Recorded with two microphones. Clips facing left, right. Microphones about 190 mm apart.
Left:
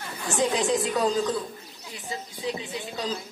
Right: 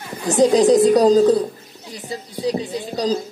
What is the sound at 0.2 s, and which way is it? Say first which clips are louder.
A woman's voice: right 11 dB; 35° right (ahead or behind).